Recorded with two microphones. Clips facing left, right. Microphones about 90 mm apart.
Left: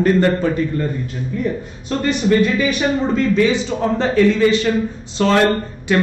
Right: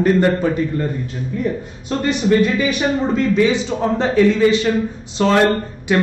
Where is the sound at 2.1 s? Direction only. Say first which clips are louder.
Even; centre (ahead or behind).